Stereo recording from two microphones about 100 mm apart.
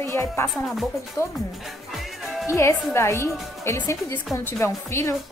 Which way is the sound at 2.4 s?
30° left (ahead or behind).